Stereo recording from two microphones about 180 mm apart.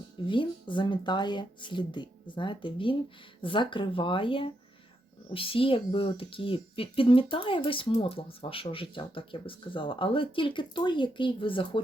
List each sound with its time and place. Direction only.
0.3 s speech: 25° left (ahead or behind)